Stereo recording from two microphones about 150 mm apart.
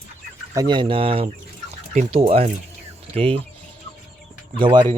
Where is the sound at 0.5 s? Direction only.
30° right (ahead or behind).